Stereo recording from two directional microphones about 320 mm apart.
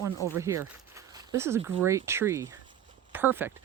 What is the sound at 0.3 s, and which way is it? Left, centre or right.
Speech, centre.